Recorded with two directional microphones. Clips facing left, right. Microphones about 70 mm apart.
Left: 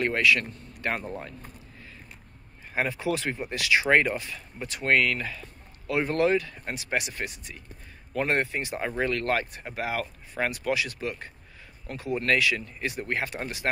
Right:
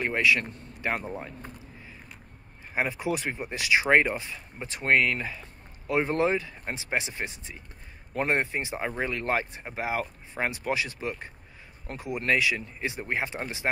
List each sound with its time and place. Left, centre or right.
0.0 s speech: centre
2.7 s speech: centre